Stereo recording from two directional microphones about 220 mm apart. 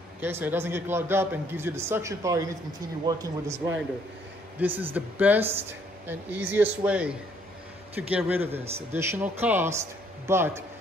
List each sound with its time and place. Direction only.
0.2 s a man's voice: 10° right (ahead or behind)
4.6 s a man's voice: 10° right (ahead or behind)